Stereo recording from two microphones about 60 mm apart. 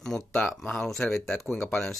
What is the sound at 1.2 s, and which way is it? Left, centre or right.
Speech, centre.